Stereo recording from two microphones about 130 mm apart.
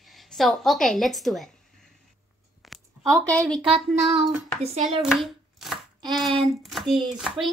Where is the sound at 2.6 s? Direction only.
Centre (ahead or behind).